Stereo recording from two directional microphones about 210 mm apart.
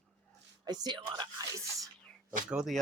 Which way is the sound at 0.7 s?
20° right (ahead or behind).